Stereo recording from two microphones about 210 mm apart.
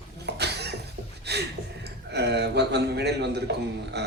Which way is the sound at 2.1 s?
55° right (ahead or behind).